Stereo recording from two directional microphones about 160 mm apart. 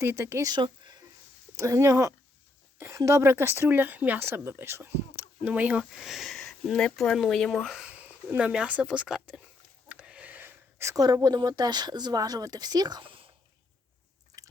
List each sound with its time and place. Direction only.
0.0 s speech: 15° right (ahead or behind)
0.5 s a sound: 25° right (ahead or behind)
1.5 s speech: 20° right (ahead or behind)